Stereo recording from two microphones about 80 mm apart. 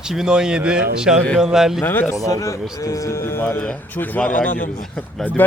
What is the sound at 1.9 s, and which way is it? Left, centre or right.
Speech, left.